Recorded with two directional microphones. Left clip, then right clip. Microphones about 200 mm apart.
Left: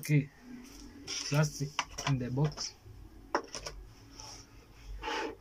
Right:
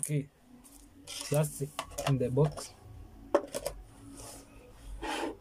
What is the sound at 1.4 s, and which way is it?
Speech, 15° right (ahead or behind).